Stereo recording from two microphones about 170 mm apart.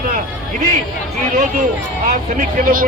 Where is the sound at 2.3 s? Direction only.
55° right (ahead or behind).